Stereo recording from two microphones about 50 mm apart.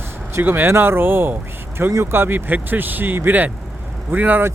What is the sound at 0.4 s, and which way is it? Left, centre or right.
Speech, right.